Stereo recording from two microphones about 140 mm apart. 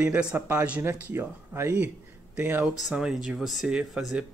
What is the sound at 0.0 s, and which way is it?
Speech, 10° right (ahead or behind).